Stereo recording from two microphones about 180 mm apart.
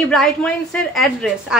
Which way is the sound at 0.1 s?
Centre (ahead or behind).